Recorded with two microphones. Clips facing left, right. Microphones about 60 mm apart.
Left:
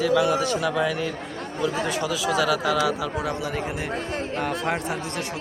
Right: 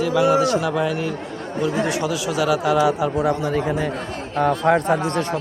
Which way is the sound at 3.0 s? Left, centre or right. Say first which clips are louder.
Right 7 dB; right.